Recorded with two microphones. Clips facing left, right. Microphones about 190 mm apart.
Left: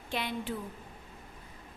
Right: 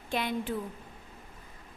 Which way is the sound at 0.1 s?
45° right (ahead or behind).